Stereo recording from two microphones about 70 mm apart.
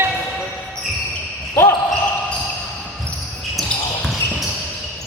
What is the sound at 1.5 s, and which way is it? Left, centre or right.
Basketball bounce, left.